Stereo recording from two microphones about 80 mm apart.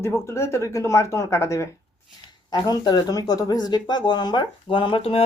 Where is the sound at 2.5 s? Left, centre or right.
Left.